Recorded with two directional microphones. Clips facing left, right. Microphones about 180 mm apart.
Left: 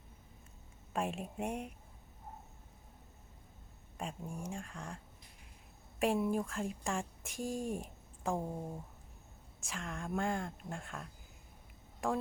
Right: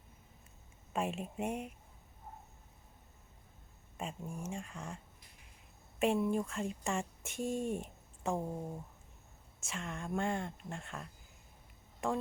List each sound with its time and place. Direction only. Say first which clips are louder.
0.9 s speech: right 1 dB; centre (ahead or behind)
3.9 s speech: even; centre (ahead or behind)
6.0 s speech: right 1 dB; centre (ahead or behind)